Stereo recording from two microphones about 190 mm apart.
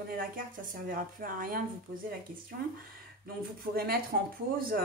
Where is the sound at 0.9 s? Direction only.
50° right (ahead or behind).